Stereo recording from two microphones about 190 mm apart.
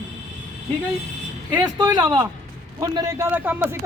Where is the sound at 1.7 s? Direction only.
20° right (ahead or behind).